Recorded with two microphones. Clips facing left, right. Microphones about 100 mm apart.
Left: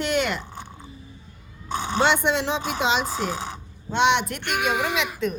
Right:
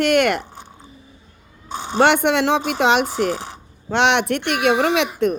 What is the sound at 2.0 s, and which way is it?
A child's voice, 65° right (ahead or behind).